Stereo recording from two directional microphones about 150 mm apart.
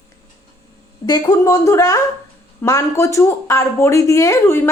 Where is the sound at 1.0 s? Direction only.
25° left (ahead or behind).